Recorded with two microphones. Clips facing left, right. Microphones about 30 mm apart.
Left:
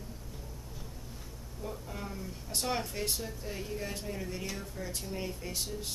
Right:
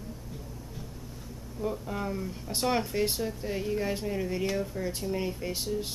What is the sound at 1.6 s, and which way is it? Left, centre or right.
Speech, centre.